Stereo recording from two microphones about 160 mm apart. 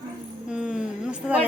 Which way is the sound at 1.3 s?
10° right (ahead or behind).